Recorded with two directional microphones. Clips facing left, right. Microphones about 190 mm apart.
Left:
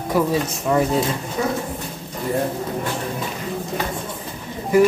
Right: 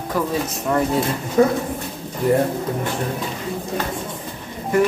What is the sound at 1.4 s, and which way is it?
Speech, 50° right (ahead or behind).